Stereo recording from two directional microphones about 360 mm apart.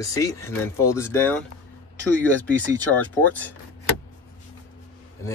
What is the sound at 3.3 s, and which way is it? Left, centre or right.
Speech, centre.